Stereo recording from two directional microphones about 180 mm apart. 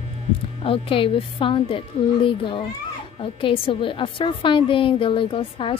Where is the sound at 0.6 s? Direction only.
30° left (ahead or behind).